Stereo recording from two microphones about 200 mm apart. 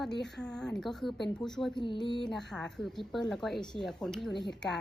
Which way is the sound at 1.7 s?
25° left (ahead or behind).